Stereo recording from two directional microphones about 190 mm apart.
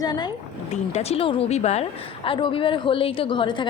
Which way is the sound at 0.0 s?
20° left (ahead or behind).